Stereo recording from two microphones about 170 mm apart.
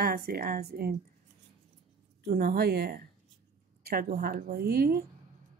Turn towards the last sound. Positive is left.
turn(degrees=-65)  # may be behind; listen again after turning